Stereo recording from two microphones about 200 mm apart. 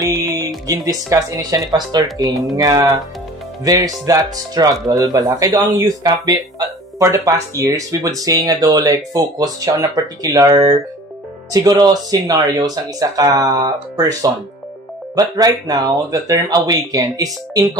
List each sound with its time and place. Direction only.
0.0 s music: 20° right (ahead or behind)
0.7 s speech: 15° right (ahead or behind)